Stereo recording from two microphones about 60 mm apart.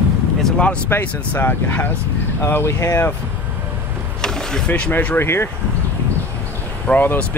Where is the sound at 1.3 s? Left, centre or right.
Left.